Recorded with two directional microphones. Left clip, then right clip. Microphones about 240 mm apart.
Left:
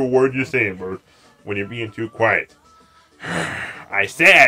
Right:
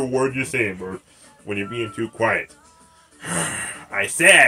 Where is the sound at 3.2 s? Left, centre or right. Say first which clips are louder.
Left 2 dB; centre.